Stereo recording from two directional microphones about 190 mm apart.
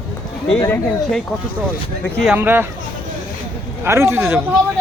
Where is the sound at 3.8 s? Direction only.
15° right (ahead or behind).